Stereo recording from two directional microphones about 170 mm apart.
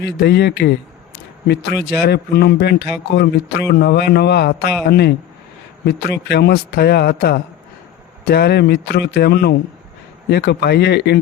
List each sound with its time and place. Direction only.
0.0 s speech: 75° left (ahead or behind)
2.0 s speech: 75° left (ahead or behind)
5.8 s speech: 85° left